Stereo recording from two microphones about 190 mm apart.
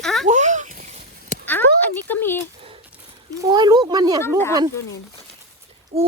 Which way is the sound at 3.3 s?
20° right (ahead or behind).